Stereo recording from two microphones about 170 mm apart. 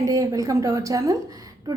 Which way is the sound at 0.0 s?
20° right (ahead or behind).